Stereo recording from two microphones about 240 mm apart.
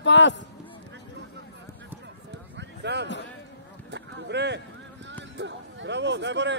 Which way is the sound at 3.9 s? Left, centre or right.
Right.